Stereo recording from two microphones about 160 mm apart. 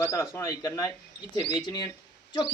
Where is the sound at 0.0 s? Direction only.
15° left (ahead or behind).